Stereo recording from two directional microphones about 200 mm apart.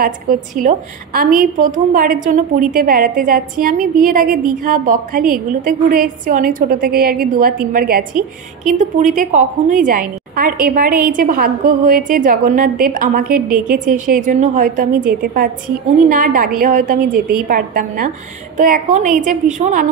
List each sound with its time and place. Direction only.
0.0 s a woman's voice: 45° right (ahead or behind)